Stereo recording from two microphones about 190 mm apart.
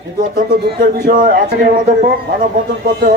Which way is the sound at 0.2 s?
50° right (ahead or behind).